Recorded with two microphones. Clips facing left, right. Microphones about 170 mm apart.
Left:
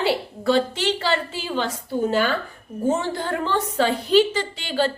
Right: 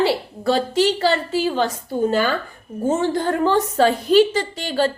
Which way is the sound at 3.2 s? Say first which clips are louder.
Right 6 dB; 45° right (ahead or behind).